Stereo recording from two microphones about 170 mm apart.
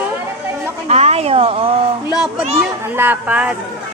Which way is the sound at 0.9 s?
40° right (ahead or behind).